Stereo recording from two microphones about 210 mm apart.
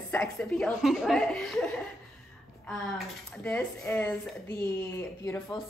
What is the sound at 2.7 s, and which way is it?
Speech, 5° left (ahead or behind).